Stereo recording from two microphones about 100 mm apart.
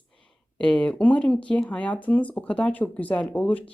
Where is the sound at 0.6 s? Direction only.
15° left (ahead or behind).